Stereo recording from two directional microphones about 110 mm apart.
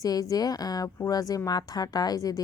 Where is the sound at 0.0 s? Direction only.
35° left (ahead or behind).